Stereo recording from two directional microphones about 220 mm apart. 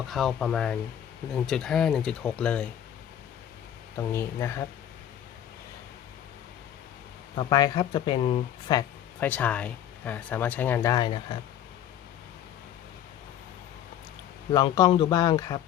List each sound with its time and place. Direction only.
0.1 s speech: centre (ahead or behind)
3.9 s speech: 10° left (ahead or behind)
7.3 s speech: 20° left (ahead or behind)
9.2 s speech: 5° left (ahead or behind)
14.5 s speech: 20° left (ahead or behind)